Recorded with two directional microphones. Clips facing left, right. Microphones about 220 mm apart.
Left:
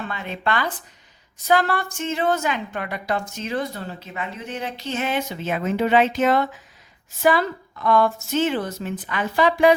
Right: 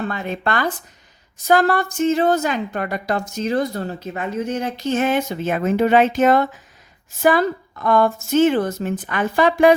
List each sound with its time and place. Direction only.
0.0 s a woman's voice: 45° right (ahead or behind)